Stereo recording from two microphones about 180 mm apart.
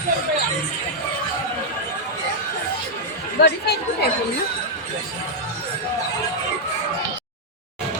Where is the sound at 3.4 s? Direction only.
65° left (ahead or behind).